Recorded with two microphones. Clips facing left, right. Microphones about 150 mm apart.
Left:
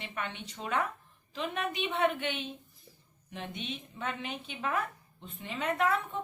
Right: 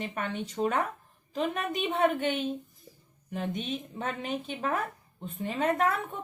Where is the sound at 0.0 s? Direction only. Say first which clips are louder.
Right 6 dB; 40° right (ahead or behind).